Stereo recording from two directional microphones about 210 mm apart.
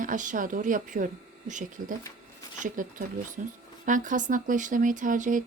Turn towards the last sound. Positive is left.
turn(degrees=-40)  # may be behind; listen again after turning